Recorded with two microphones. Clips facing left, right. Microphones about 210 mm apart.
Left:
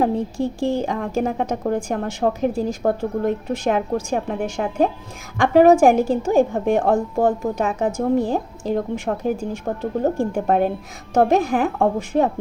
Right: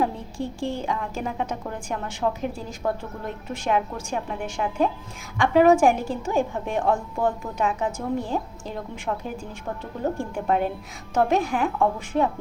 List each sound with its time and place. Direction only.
0.0 s a woman's voice: 40° left (ahead or behind)